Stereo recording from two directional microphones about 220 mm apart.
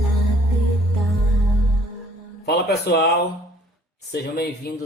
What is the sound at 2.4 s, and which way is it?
Speech, 45° left (ahead or behind).